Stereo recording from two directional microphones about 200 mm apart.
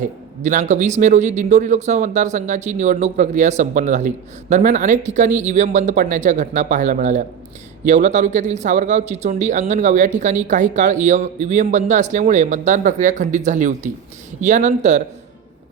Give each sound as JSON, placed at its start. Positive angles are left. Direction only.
{"t": 0.0, "sound": "a man's voice", "side_deg": -40}